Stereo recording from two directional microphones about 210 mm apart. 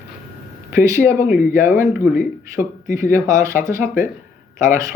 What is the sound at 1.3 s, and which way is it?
Speech, 40° left (ahead or behind).